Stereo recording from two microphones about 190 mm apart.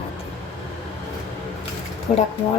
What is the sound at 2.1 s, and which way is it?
Speech, 35° left (ahead or behind).